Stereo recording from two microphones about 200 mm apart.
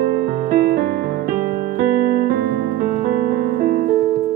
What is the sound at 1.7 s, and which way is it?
Keyboard, 45° right (ahead or behind).